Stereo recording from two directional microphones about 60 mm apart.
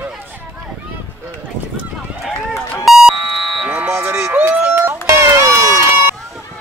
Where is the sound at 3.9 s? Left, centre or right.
Right.